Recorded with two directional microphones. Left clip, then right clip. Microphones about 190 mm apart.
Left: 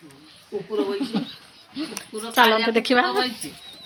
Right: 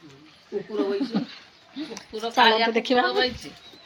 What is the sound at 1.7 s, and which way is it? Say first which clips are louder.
Speech: left 3 dB; centre (ahead or behind).